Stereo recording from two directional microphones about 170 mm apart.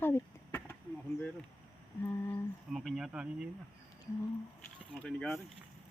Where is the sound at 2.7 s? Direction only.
Centre (ahead or behind).